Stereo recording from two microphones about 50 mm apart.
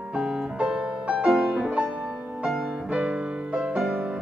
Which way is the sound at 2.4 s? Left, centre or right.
Centre.